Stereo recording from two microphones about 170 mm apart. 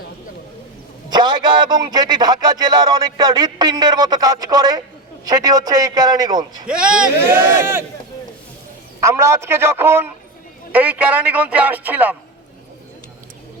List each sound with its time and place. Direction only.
1.1 s speech: 25° right (ahead or behind)
6.7 s a man's voice: 5° right (ahead or behind)
9.0 s a man's voice: 15° right (ahead or behind)